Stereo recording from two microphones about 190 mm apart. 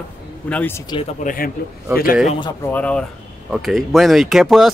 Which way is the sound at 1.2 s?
50° left (ahead or behind).